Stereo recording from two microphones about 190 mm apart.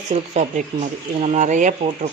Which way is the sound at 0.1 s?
35° right (ahead or behind).